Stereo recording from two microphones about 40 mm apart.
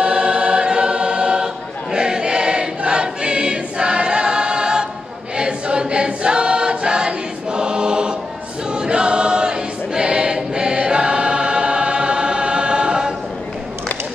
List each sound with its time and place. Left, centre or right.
0.0 s choir: right